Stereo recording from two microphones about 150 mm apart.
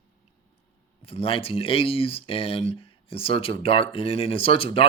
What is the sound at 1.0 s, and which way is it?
Speech, 40° left (ahead or behind).